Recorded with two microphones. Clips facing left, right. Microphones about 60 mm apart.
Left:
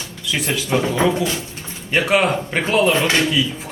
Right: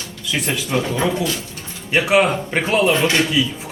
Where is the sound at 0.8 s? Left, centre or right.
Left.